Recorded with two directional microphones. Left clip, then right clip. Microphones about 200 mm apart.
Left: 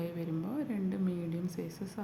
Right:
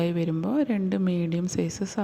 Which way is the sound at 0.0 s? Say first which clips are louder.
Right 11 dB; 35° right (ahead or behind).